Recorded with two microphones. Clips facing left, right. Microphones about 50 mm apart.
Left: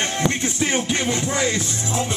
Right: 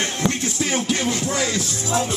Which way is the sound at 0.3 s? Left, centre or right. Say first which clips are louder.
Left 1 dB; left.